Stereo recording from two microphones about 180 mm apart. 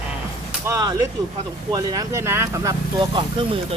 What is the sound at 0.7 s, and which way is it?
Speech, 20° right (ahead or behind).